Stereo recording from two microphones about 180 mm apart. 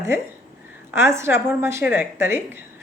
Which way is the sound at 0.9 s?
15° right (ahead or behind).